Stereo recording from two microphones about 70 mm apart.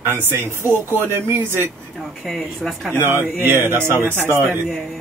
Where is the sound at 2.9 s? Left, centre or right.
Right.